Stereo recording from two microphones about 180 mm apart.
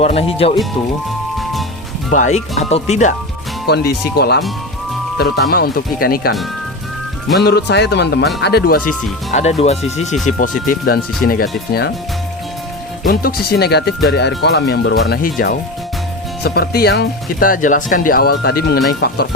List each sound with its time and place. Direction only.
0.0 s speech: 35° left (ahead or behind)
2.1 s speech: 40° left (ahead or behind)
3.7 s speech: 65° left (ahead or behind)
5.5 s speech: 60° left (ahead or behind)
7.4 s speech: 65° left (ahead or behind)
9.3 s speech: 35° left (ahead or behind)
10.2 s speech: 50° left (ahead or behind)
13.1 s speech: 55° left (ahead or behind)